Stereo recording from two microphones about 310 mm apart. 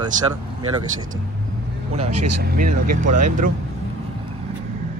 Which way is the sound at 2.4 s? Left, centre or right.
Right.